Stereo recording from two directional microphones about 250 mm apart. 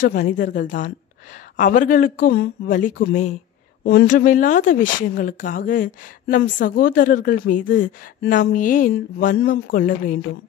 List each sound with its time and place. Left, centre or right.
0.0 s a woman's voice: left